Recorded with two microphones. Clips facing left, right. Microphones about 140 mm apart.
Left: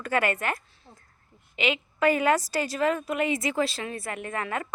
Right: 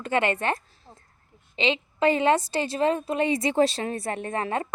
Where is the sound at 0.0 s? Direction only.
25° right (ahead or behind).